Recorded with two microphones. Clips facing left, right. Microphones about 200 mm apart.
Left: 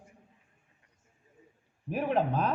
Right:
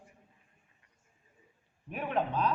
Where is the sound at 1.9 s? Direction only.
35° left (ahead or behind).